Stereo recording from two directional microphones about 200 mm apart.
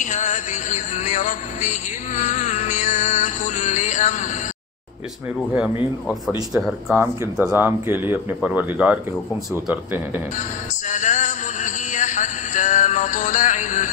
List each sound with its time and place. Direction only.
0.0 s music: 35° left (ahead or behind)
6.5 s speech: centre (ahead or behind)
10.9 s a sound: 35° left (ahead or behind)